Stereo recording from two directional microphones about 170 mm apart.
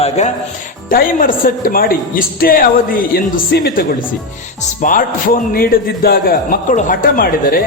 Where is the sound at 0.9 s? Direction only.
55° left (ahead or behind).